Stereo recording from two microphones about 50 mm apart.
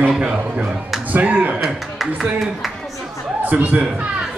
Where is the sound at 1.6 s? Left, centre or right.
Centre.